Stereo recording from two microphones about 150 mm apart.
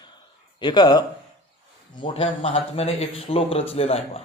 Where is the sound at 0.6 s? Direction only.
30° left (ahead or behind).